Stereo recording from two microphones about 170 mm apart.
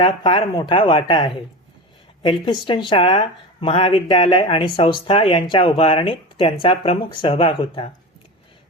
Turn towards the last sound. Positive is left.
turn(degrees=30)  # may be behind; listen again after turning